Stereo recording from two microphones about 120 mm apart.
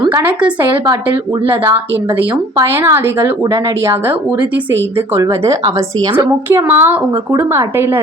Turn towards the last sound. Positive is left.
turn(degrees=-20)  # may be behind; listen again after turning